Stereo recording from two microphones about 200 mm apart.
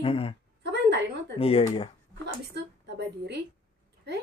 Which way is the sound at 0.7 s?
60° right (ahead or behind).